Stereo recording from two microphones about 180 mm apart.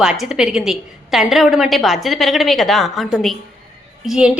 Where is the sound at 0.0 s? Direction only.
5° right (ahead or behind).